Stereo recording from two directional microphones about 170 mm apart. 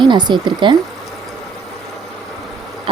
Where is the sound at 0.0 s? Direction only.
25° right (ahead or behind).